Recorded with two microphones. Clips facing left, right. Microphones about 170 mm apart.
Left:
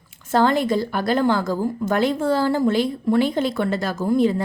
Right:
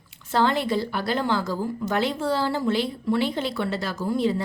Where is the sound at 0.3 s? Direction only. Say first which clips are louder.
Left 4 dB; 45° left (ahead or behind).